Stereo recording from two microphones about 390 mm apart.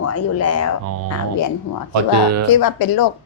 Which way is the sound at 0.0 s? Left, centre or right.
Left.